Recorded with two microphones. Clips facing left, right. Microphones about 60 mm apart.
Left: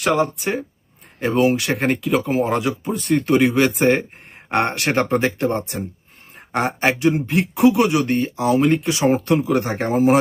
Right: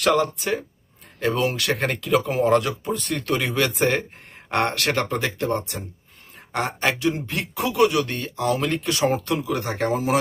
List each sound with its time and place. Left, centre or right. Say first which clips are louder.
0.2 s speech: left 3 dB; centre
3.5 s a man's voice: left 5 dB; left
9.2 s a man's voice: left 6 dB; left